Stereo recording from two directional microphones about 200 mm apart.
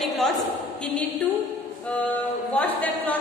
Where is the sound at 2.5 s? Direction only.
5° left (ahead or behind).